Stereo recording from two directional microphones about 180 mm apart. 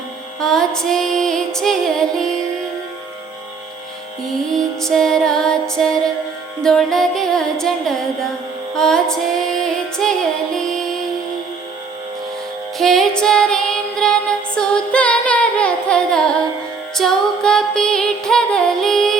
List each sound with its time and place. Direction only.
0.3 s music: 5° left (ahead or behind)
4.2 s music: centre (ahead or behind)
8.7 s female singing: 5° left (ahead or behind)
12.8 s music: centre (ahead or behind)